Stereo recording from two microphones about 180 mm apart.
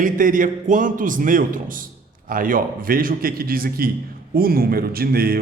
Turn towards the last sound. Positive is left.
turn(degrees=-55)  # may be behind; listen again after turning